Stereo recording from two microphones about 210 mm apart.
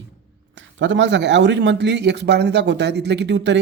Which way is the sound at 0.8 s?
60° right (ahead or behind).